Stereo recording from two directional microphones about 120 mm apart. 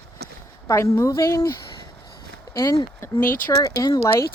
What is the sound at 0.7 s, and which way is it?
Speech, 25° left (ahead or behind).